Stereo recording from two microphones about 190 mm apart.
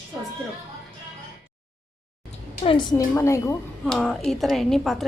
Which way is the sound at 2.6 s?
25° left (ahead or behind).